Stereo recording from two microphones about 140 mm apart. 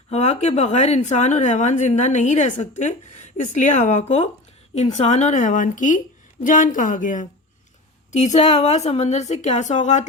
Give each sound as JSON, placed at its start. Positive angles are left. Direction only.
{"t": 0.1, "sound": "a woman's voice", "side_deg": 55}
{"t": 8.1, "sound": "a woman's voice", "side_deg": 55}